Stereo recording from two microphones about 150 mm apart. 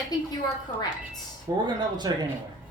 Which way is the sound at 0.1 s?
25° left (ahead or behind).